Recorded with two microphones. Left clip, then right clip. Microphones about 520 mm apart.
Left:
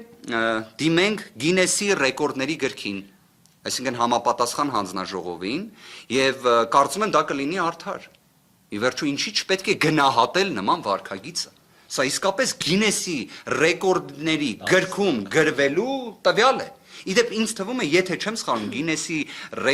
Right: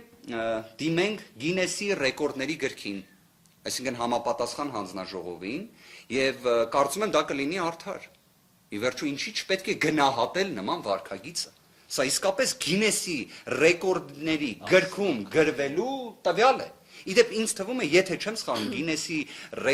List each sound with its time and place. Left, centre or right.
0.3 s speech: left